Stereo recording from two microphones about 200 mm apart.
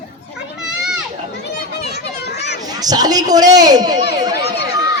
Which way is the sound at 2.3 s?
60° left (ahead or behind).